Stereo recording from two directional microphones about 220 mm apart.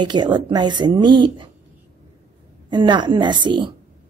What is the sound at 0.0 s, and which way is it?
A woman's voice, 20° right (ahead or behind).